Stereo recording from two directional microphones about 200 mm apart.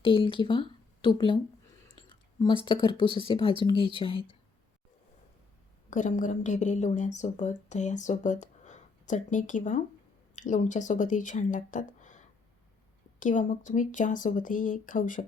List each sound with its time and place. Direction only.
0.0 s speech: 25° left (ahead or behind)
2.0 s whispering: 25° left (ahead or behind)
2.6 s a woman's voice: 25° left (ahead or behind)
5.9 s speech: 40° left (ahead or behind)